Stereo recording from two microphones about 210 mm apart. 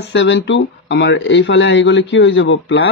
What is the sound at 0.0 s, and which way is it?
Speech, 60° left (ahead or behind).